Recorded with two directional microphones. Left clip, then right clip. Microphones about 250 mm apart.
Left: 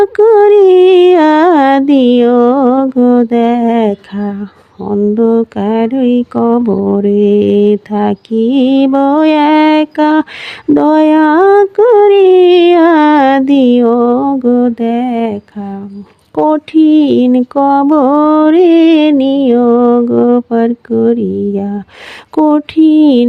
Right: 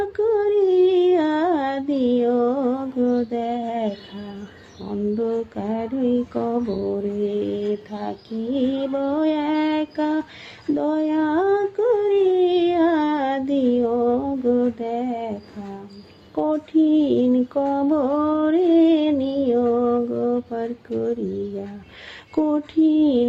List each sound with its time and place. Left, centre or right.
0.0 s a sound: left
4.9 s mantra: left
16.3 s mantra: left